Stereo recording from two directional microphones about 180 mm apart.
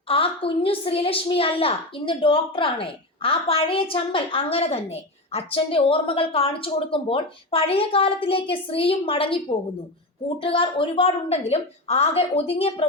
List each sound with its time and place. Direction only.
0.1 s a woman's voice: 30° left (ahead or behind)